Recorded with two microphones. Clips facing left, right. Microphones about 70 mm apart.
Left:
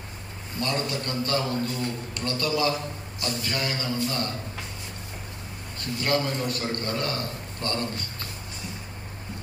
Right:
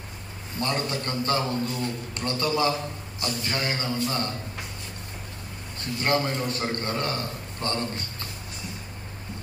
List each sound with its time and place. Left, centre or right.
0.6 s a man's voice: right
6.0 s a man's voice: right